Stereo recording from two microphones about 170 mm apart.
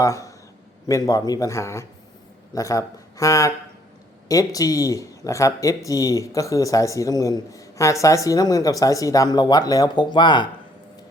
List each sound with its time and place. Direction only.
0.0 s a man's voice: 20° left (ahead or behind)